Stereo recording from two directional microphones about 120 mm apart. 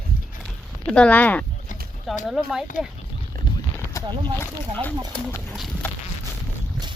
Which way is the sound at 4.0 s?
25° left (ahead or behind).